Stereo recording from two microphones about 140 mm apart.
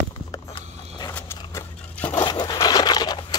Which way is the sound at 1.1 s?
15° left (ahead or behind).